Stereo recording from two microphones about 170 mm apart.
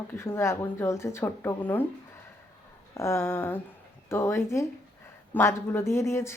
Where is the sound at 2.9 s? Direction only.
15° left (ahead or behind).